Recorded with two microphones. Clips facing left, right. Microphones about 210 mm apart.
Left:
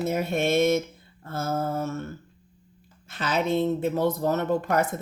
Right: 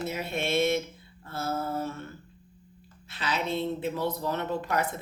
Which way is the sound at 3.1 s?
45° left (ahead or behind).